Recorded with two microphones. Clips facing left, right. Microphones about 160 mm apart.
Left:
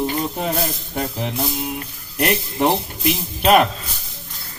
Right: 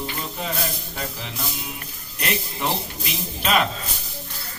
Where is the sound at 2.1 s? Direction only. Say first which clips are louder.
Left 8 dB; 55° left (ahead or behind).